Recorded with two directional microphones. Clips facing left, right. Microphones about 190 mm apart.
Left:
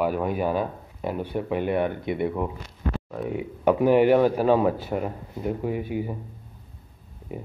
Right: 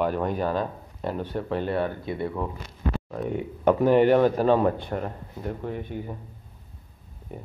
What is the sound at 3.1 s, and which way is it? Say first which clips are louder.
Speech: even; 5° left (ahead or behind).